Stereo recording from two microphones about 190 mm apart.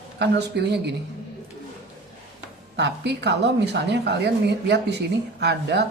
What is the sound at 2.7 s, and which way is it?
A woman's voice, 65° right (ahead or behind).